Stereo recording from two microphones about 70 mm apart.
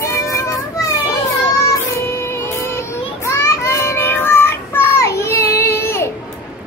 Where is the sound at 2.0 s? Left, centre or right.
Left.